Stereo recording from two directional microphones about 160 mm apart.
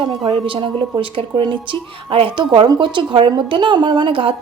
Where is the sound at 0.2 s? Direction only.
30° right (ahead or behind).